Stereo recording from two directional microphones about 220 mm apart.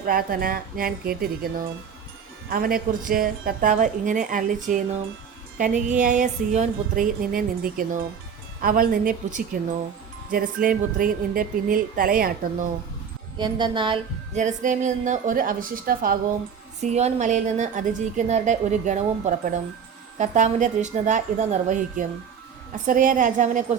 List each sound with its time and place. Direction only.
0.0 s a woman's voice: 40° right (ahead or behind)
13.4 s a woman's voice: 20° right (ahead or behind)
14.3 s a woman's voice: 35° right (ahead or behind)